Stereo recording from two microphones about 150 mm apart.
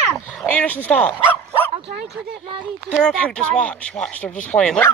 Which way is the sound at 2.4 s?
35° right (ahead or behind).